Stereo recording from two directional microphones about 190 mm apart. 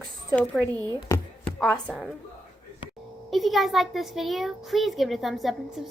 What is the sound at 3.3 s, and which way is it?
A woman's voice, centre (ahead or behind).